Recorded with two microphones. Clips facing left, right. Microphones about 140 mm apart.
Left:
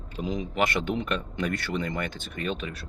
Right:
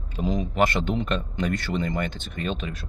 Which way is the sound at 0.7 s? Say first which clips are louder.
Right 2 dB; 25° right (ahead or behind).